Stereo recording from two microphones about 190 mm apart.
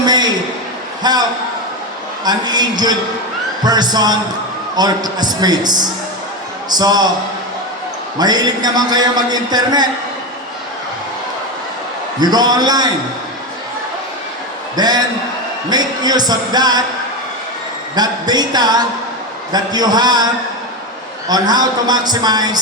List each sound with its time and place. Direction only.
0.0 s a sound: 20° right (ahead or behind)
1.0 s a man's voice: 20° right (ahead or behind)
2.2 s a man's voice: 20° right (ahead or behind)
8.2 s a man's voice: 20° right (ahead or behind)
12.2 s a man's voice: 20° right (ahead or behind)
14.8 s a man's voice: 20° right (ahead or behind)
17.9 s a man's voice: 20° right (ahead or behind)
21.2 s a man's voice: 20° right (ahead or behind)